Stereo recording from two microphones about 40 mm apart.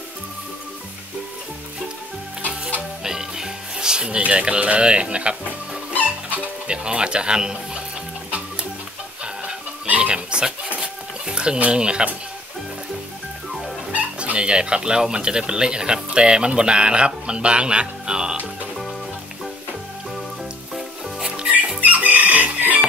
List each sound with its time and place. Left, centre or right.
3.0 s music: centre
4.2 s speech: right
6.7 s speech: right
9.2 s music: right
9.8 s pig: right
10.1 s dog: centre
10.8 s a sound: right
11.7 s speech: right
13.5 s music: centre
13.9 s speech: right
21.2 s music: centre
21.8 s chicken: right